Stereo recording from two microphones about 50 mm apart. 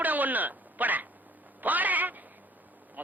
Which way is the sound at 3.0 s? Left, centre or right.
Right.